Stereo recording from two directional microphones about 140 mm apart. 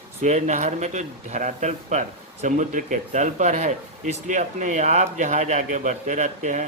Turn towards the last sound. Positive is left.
turn(degrees=-60)  # may be behind; listen again after turning